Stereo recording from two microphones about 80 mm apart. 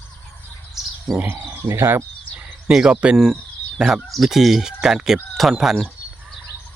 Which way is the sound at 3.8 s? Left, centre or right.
Centre.